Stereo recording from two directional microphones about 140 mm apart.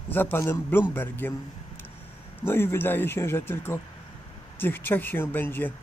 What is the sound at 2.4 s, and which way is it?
A man's voice, 15° left (ahead or behind).